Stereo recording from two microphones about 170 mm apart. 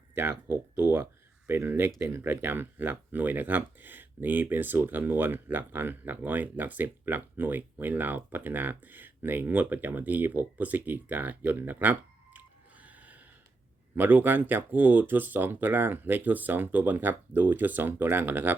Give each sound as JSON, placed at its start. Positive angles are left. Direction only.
{"t": 0.1, "sound": "speech", "side_deg": -15}